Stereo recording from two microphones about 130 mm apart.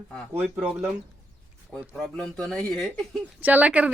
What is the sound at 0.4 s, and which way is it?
Speech, 10° right (ahead or behind).